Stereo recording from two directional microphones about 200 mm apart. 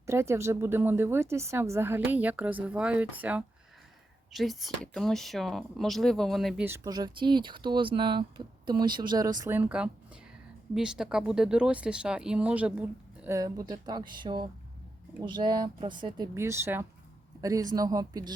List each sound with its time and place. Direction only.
0.0 s speech: 15° right (ahead or behind)
6.7 s speech: 15° right (ahead or behind)
13.2 s speech: 15° right (ahead or behind)